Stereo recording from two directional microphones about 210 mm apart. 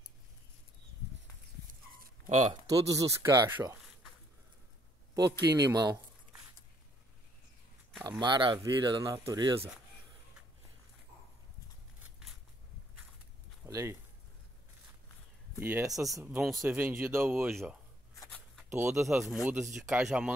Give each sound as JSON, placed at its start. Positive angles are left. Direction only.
{"t": 2.0, "sound": "a sound", "side_deg": -35}
{"t": 2.7, "sound": "speech", "side_deg": -15}
{"t": 5.1, "sound": "speech", "side_deg": -20}
{"t": 8.2, "sound": "speech", "side_deg": -20}
{"t": 13.7, "sound": "speech", "side_deg": -15}
{"t": 15.6, "sound": "speech", "side_deg": -10}
{"t": 18.7, "sound": "speech", "side_deg": -5}